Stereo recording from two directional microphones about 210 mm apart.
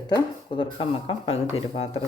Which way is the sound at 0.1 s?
25° left (ahead or behind).